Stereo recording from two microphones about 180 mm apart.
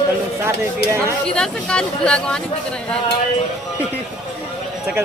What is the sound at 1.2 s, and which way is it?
Speech, 5° left (ahead or behind).